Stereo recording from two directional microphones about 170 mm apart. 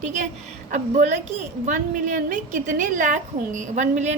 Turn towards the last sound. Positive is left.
turn(degrees=-40)  # may be behind; listen again after turning